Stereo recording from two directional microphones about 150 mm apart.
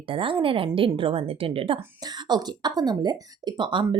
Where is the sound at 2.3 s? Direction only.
25° right (ahead or behind).